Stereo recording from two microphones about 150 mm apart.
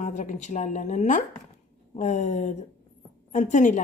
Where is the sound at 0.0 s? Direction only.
55° left (ahead or behind).